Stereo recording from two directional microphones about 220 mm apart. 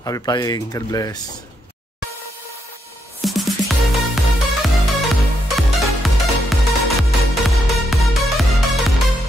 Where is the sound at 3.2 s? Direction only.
Centre (ahead or behind).